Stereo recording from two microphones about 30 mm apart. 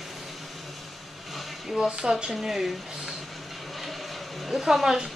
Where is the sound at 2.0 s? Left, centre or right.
Right.